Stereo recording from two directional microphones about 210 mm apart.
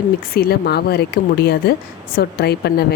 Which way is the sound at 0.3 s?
50° left (ahead or behind).